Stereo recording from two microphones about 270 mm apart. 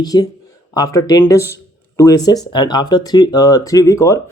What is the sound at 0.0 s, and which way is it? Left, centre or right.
Speech, centre.